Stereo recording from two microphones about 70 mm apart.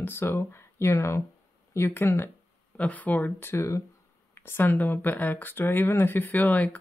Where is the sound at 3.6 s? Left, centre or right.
Left.